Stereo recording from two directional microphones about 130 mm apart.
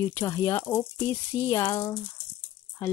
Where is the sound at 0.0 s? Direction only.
20° left (ahead or behind).